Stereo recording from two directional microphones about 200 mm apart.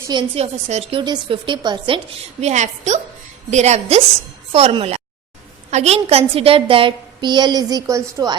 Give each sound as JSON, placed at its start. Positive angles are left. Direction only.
{"t": 0.1, "sound": "a woman's voice", "side_deg": -25}
{"t": 2.4, "sound": "a woman's voice", "side_deg": -35}